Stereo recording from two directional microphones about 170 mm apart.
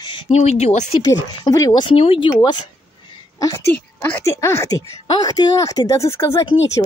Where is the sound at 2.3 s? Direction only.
25° left (ahead or behind).